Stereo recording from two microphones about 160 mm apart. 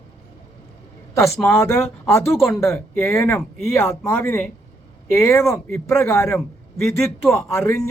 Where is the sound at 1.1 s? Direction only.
15° left (ahead or behind).